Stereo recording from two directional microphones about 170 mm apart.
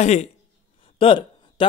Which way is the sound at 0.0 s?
40° left (ahead or behind).